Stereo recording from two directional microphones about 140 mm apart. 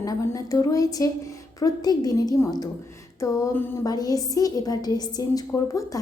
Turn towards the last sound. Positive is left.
turn(degrees=25)  # may be behind; listen again after turning